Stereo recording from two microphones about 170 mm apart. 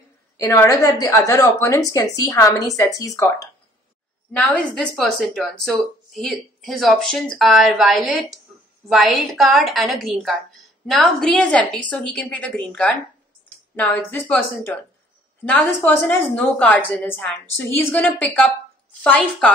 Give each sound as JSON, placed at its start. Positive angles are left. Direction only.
{"t": 0.4, "sound": "a woman's voice", "side_deg": 15}
{"t": 4.4, "sound": "a woman's voice", "side_deg": 5}